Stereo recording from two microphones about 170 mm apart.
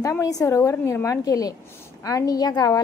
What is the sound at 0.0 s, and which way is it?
A woman's voice, 20° left (ahead or behind).